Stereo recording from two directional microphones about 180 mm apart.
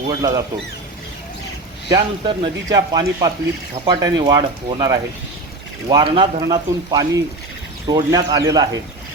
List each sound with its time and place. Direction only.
0.1 s speech: 20° right (ahead or behind)
1.9 s speech: 25° right (ahead or behind)